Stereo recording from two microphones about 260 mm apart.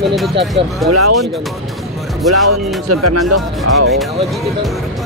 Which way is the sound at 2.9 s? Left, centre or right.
Right.